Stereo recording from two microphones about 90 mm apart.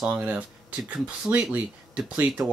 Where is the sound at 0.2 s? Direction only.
15° right (ahead or behind).